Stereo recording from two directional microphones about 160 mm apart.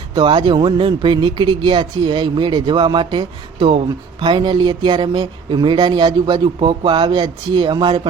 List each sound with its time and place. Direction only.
0.1 s speech: 30° right (ahead or behind)